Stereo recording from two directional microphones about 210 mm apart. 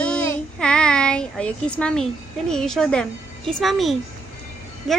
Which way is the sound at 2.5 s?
Centre (ahead or behind).